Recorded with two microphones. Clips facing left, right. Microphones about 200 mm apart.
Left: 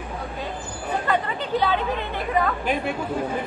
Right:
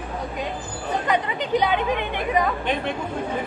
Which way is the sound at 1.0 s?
20° right (ahead or behind).